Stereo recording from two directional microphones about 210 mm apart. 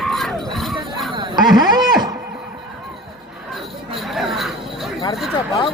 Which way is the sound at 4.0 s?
Centre (ahead or behind).